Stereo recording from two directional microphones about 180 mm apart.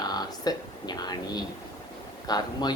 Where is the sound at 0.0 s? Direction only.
20° left (ahead or behind).